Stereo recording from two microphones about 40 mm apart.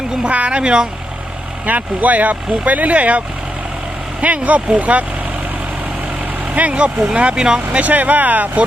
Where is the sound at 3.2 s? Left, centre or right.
Right.